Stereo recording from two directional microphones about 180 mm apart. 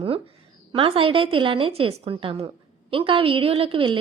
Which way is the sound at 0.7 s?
30° right (ahead or behind).